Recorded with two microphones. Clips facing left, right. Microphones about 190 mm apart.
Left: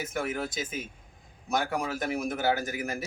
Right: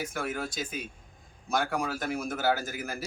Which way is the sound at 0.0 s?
20° left (ahead or behind).